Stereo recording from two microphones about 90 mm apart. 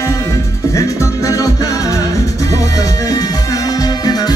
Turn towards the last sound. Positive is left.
turn(degrees=45)  # may be behind; listen again after turning